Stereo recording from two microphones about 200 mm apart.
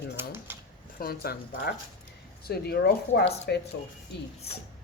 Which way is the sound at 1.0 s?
50° left (ahead or behind).